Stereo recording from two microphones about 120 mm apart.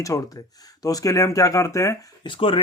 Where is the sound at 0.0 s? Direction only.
30° left (ahead or behind).